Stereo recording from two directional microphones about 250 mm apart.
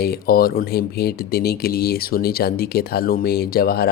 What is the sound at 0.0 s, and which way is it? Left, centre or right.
Speech, left.